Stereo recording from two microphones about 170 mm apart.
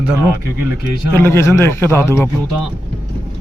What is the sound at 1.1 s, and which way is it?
Speech, 15° left (ahead or behind).